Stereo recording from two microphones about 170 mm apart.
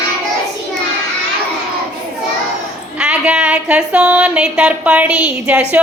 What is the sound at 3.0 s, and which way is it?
Female singing, 5° right (ahead or behind).